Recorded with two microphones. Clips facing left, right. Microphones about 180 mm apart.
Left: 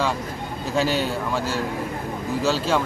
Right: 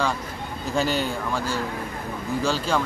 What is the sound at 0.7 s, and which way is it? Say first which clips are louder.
A man's voice: left 2 dB; centre (ahead or behind).